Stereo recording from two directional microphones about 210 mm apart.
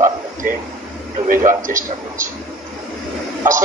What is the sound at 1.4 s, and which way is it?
Speech, 40° right (ahead or behind).